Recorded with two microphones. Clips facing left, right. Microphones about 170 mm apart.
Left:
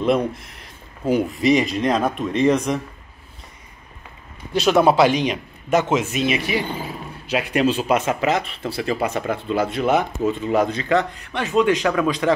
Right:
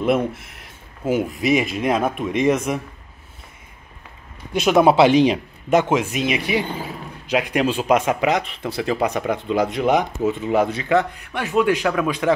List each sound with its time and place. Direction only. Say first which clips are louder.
0.0 s speech: even; 5° right (ahead or behind)
4.6 s speech: right 1 dB; 10° right (ahead or behind); by 5.4 s 30° right (ahead or behind)
5.7 s speech: right 1 dB; 15° right (ahead or behind)